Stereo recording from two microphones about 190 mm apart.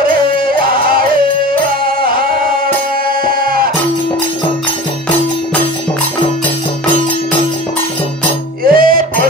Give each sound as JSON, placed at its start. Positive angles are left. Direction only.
{"t": 2.0, "sound": "music", "side_deg": -50}
{"t": 8.6, "sound": "music", "side_deg": -50}